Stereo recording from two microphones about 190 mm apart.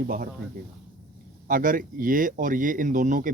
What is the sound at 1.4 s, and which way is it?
Speech, 45° right (ahead or behind).